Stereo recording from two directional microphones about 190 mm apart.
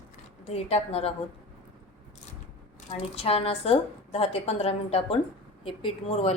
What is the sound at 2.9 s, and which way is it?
A woman's voice, 30° left (ahead or behind).